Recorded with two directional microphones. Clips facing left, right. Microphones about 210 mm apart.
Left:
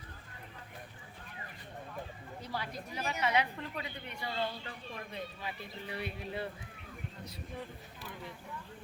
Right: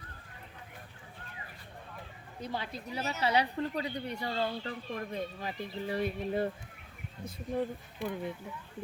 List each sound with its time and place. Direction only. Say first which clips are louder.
2.4 s a woman's voice: right 3 dB; 25° right (ahead or behind); by 8.3 s 55° right (ahead or behind)